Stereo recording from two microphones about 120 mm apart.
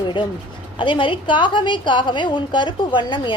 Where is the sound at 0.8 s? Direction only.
40° left (ahead or behind).